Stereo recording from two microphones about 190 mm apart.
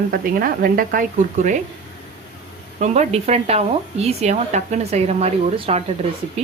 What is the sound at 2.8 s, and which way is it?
A woman's voice, 35° right (ahead or behind).